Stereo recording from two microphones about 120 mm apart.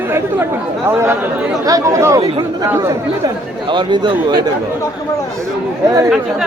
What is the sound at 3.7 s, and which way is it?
Speech, 40° right (ahead or behind).